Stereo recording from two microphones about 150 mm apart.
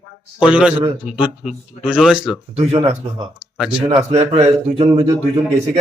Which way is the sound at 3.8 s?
40° right (ahead or behind).